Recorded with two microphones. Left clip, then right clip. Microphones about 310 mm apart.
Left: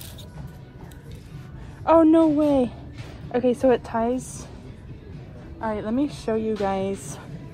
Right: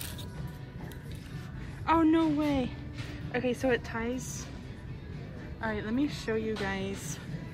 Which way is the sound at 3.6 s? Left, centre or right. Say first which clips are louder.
Left 10 dB; centre.